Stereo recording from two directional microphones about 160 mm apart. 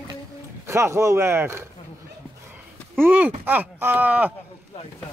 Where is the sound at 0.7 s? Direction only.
15° right (ahead or behind).